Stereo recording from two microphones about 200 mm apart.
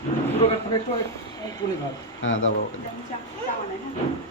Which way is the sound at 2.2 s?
80° left.